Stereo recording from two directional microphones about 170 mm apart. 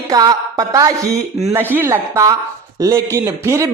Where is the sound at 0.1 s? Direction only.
20° right (ahead or behind).